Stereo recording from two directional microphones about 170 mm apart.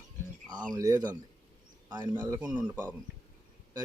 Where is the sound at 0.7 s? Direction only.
20° right (ahead or behind).